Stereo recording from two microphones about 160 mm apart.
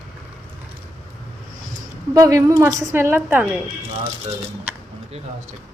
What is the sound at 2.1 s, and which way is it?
A woman's voice, 20° right (ahead or behind).